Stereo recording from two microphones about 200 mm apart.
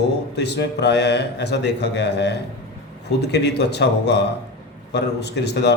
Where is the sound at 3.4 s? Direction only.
55° left (ahead or behind).